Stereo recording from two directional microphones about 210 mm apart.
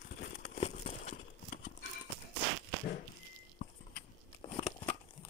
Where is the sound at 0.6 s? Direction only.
30° left (ahead or behind).